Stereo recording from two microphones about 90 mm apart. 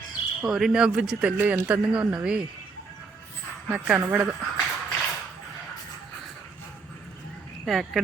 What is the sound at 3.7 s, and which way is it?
Speech, 15° right (ahead or behind).